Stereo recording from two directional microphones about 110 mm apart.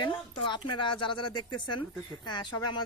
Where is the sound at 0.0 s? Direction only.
45° left (ahead or behind).